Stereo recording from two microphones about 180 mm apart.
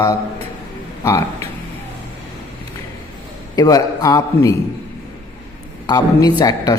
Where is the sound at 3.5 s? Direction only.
20° left (ahead or behind).